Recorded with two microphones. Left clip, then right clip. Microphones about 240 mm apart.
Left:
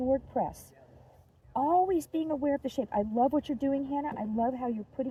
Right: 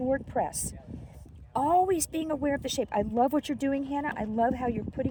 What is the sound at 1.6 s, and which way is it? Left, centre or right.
Speech, right.